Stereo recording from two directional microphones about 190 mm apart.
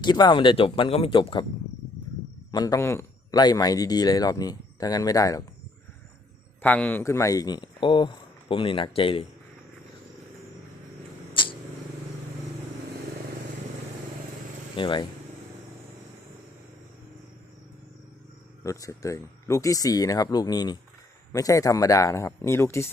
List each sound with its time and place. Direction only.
0.0 s speech: 25° left (ahead or behind)
2.5 s speech: 20° left (ahead or behind)
6.6 s speech: 10° left (ahead or behind); by 9.2 s 30° left (ahead or behind)
11.4 s a sound: 25° left (ahead or behind)
14.8 s speech: 25° left (ahead or behind)
18.6 s speech: 15° left (ahead or behind)